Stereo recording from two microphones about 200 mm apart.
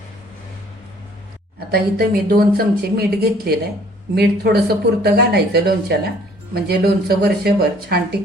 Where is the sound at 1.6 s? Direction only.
50° right (ahead or behind).